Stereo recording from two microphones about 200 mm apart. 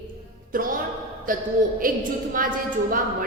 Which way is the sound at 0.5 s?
45° right (ahead or behind).